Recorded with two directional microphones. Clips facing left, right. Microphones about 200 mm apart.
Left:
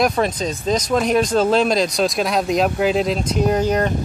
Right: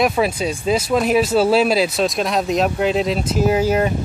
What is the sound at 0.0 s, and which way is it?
Speech, 5° right (ahead or behind).